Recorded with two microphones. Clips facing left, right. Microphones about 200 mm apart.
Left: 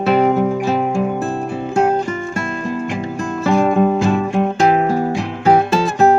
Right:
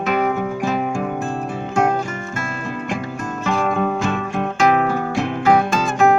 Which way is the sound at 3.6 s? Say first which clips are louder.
Left 6 dB; 30° left (ahead or behind).